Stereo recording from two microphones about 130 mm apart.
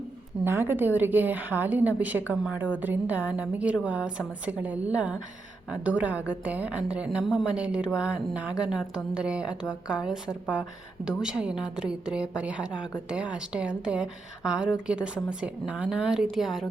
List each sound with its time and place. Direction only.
0.4 s a woman's voice: 15° right (ahead or behind); by 16.6 s centre (ahead or behind)